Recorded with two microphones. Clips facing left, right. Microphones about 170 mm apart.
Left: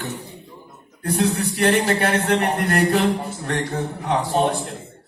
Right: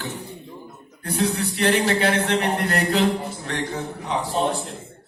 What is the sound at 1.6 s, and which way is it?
A man's voice, 60° left (ahead or behind).